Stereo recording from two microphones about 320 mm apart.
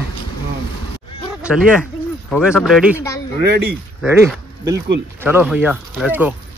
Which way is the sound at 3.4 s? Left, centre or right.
Right.